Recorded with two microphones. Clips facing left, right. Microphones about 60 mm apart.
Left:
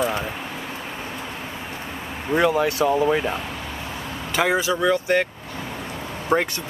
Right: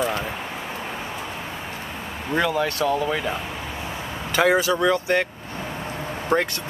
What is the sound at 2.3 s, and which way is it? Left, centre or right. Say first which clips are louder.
Speech: left 3 dB; centre.